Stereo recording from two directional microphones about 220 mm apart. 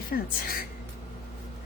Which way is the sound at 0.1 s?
40° left (ahead or behind).